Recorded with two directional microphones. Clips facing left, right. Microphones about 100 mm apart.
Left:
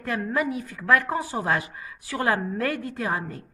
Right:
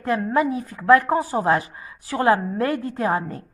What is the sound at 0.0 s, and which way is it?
A woman's voice, 30° right (ahead or behind).